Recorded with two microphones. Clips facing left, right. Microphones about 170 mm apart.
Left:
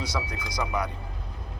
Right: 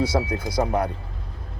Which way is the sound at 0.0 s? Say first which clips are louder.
Right 9 dB; 55° right (ahead or behind).